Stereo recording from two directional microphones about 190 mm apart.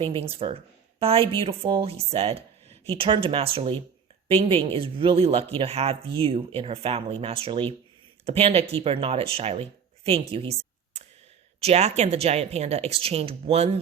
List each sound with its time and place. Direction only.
0.0 s speech: 30° right (ahead or behind)
11.6 s speech: 35° right (ahead or behind)